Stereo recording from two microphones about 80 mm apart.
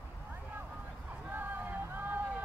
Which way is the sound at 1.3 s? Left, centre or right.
Right.